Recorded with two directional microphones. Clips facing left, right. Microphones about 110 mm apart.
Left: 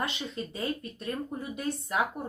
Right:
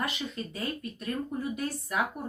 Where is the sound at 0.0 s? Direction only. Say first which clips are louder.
Even; 25° left (ahead or behind).